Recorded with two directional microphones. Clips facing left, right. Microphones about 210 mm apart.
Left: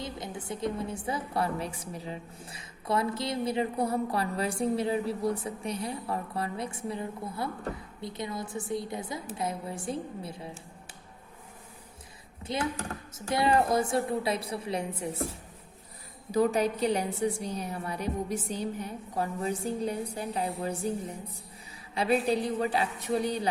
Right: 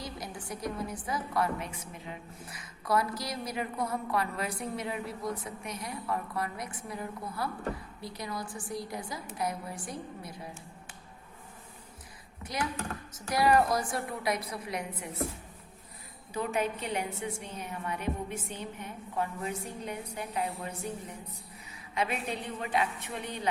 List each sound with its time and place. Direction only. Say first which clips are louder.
0.0 s a woman's voice: left 3 dB; 25° left (ahead or behind)
12.5 s a woman's voice: left 3 dB; 25° left (ahead or behind)
16.3 s a woman's voice: left 6 dB; 40° left (ahead or behind)